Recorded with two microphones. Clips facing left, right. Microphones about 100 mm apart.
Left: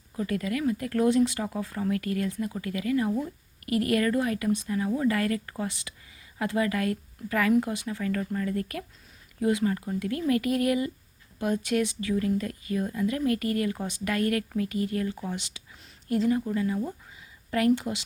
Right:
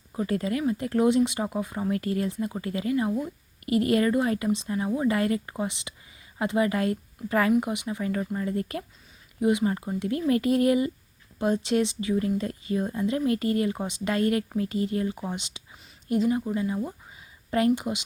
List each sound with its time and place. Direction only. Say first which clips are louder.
0.1 s speech: right 2 dB; 30° right (ahead or behind)